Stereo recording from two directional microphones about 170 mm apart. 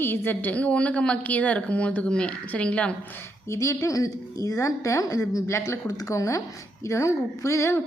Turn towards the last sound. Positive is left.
turn(degrees=15)  # may be behind; listen again after turning